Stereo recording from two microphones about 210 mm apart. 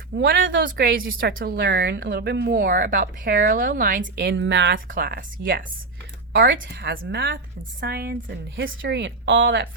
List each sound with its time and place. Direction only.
0.2 s speech: 45° right (ahead or behind)
1.0 s a woman's voice: 65° right (ahead or behind)
1.3 s speech: 45° right (ahead or behind); by 4.8 s 60° right (ahead or behind)
4.9 s speech: 45° right (ahead or behind)
8.6 s a woman's voice: 60° right (ahead or behind)